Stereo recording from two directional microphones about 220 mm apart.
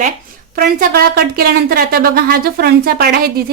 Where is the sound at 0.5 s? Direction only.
45° right (ahead or behind).